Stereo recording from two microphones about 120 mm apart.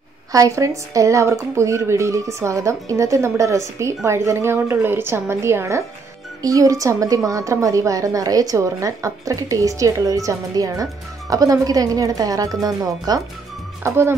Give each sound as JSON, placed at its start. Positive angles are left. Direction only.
{"t": 0.3, "sound": "a woman's voice", "side_deg": -25}